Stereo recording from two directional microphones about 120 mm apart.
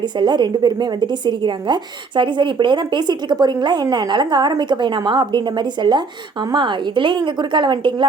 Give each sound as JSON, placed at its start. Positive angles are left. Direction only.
{"t": 0.2, "sound": "speech", "side_deg": -40}